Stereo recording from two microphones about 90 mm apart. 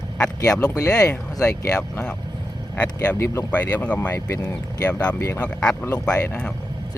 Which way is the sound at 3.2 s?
30° left (ahead or behind).